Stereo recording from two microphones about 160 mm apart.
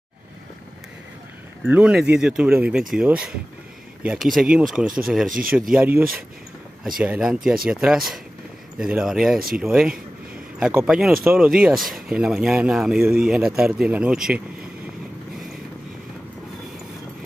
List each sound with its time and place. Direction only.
1.6 s speech: 5° right (ahead or behind)
5.3 s speech: 60° right (ahead or behind)
5.8 s speech: 10° right (ahead or behind)